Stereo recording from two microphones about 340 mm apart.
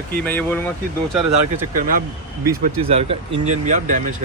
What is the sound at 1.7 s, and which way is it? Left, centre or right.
Speech, right.